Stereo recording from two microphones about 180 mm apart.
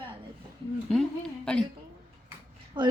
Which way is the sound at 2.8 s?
25° right (ahead or behind).